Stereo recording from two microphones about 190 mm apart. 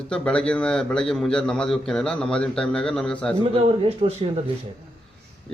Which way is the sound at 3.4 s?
30° right (ahead or behind).